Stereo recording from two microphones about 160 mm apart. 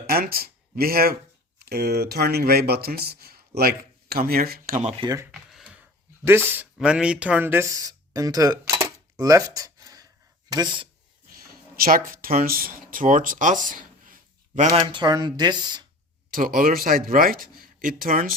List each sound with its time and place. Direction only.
0.1 s speech: 70° right (ahead or behind)
5.0 s speech: 20° right (ahead or behind)
5.3 s computer keyboard: 5° right (ahead or behind)
6.7 s speech: 5° right (ahead or behind); by 9.4 s 20° right (ahead or behind)
9.6 s a sound: 20° right (ahead or behind)
10.5 s speech: 25° right (ahead or behind)
11.3 s a sound: 60° right (ahead or behind)
14.7 s speech: 25° right (ahead or behind)
16.3 s speech: 60° right (ahead or behind)